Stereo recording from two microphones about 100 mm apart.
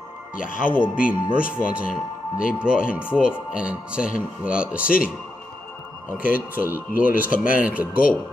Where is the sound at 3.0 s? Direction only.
20° left (ahead or behind).